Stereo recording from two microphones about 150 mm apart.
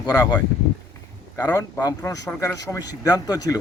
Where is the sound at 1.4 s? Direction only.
25° left (ahead or behind).